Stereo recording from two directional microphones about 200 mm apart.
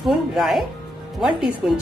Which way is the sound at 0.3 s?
Centre (ahead or behind).